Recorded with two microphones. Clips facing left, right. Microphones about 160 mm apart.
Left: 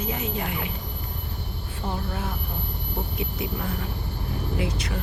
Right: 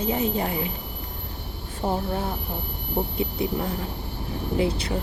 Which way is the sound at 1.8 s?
35° right (ahead or behind).